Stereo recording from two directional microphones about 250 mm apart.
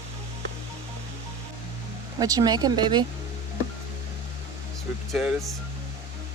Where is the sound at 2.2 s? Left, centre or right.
Centre.